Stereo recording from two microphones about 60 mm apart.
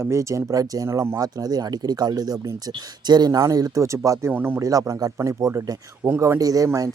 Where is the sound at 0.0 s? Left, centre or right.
Right.